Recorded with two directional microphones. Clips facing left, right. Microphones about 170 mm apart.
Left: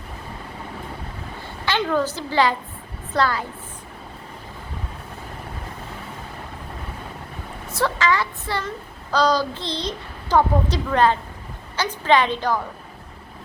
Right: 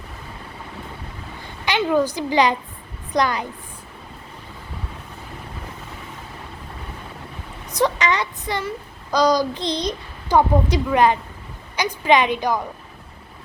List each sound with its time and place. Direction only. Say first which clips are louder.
1.6 s a child's voice: right 3 dB; 15° right (ahead or behind)
7.7 s a child's voice: right 1 dB; 15° right (ahead or behind)